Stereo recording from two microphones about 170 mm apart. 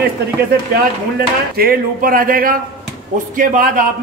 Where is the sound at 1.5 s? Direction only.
60° right (ahead or behind).